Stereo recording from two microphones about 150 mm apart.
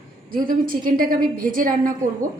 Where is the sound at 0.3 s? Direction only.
70° right (ahead or behind).